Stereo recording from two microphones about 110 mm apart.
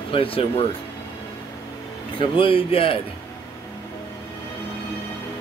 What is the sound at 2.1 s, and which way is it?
Speech, 50° left (ahead or behind).